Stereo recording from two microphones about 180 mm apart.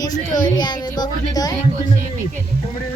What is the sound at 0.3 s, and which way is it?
Speech, 45° left (ahead or behind).